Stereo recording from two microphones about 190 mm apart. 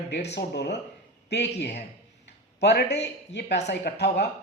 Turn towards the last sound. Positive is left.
turn(degrees=60)  # may be behind; listen again after turning